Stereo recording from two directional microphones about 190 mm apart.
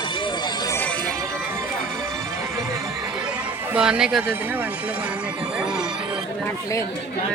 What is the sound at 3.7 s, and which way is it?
Speech, 5° right (ahead or behind).